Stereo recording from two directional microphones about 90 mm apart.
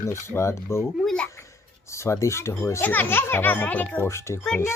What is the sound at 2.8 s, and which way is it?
A child's voice, 20° left (ahead or behind).